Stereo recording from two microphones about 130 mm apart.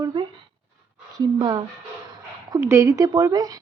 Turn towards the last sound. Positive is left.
turn(degrees=-30)  # may be behind; listen again after turning